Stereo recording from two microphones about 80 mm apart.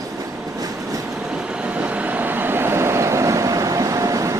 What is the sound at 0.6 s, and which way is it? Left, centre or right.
Vehicle, right.